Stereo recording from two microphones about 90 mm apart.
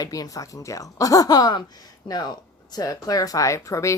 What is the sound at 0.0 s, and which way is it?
Speech, 40° left (ahead or behind).